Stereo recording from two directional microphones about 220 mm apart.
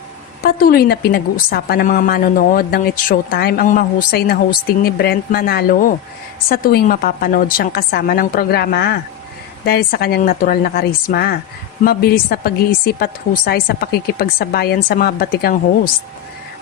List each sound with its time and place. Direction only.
0.4 s a woman's voice: 45° left (ahead or behind)